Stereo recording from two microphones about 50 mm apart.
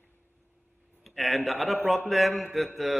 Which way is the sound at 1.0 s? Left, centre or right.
Centre.